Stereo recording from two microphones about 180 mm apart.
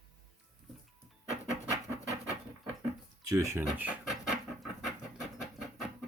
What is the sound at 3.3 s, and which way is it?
Speech, 15° right (ahead or behind).